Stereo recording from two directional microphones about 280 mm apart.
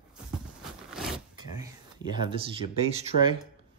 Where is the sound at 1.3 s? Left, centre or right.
Centre.